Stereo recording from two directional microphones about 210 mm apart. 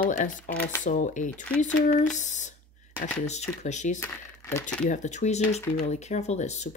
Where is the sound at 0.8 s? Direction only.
35° left (ahead or behind).